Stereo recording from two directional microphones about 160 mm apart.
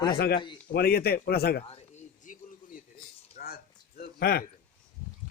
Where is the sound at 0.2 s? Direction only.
75° left (ahead or behind).